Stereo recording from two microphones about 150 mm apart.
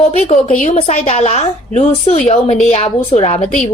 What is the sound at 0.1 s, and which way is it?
A woman's voice, 45° left (ahead or behind).